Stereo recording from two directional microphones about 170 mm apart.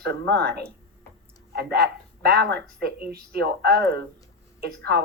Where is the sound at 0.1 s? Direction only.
75° right (ahead or behind).